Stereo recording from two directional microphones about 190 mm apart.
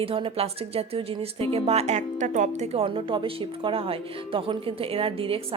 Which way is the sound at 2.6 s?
30° right (ahead or behind).